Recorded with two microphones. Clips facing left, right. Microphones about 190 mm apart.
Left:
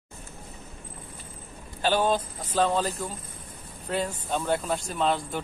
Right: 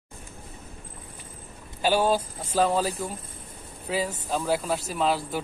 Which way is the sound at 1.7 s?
10° right (ahead or behind).